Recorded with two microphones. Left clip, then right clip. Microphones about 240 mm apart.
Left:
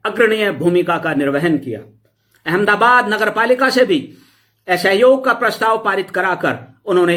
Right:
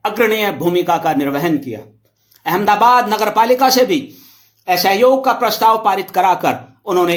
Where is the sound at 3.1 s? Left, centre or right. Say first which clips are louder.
Right 2 dB; right.